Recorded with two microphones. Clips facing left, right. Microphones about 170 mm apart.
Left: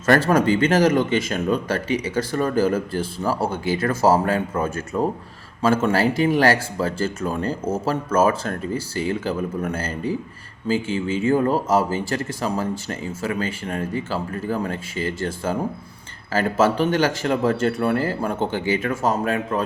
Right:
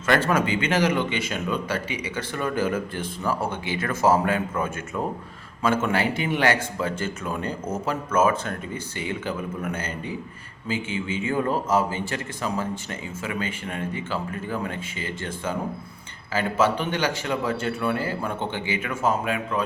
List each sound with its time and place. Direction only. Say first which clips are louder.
0.0 s a man's voice: left 5 dB; 40° left (ahead or behind)